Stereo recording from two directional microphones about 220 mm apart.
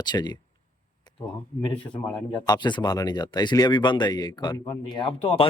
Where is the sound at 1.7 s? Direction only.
25° left (ahead or behind).